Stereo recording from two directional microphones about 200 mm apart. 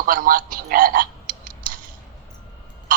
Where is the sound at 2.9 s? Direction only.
45° right (ahead or behind).